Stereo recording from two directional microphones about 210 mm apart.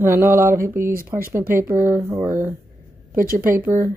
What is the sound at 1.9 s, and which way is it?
Mantra, 10° right (ahead or behind).